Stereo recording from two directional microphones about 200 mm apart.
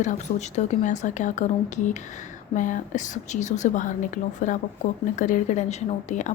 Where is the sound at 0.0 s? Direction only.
35° left (ahead or behind).